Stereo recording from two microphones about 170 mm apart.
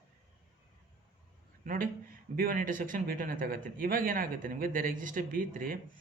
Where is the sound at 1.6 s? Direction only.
50° right (ahead or behind).